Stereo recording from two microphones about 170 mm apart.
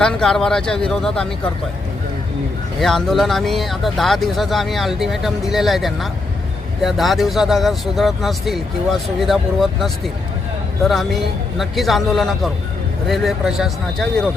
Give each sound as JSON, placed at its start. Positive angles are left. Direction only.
{"t": 0.0, "sound": "speech", "side_deg": 5}
{"t": 2.8, "sound": "speech", "side_deg": 0}